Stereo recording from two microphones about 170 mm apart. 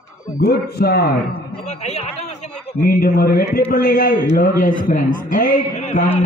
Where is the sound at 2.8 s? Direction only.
60° left (ahead or behind); by 6.2 s 45° left (ahead or behind).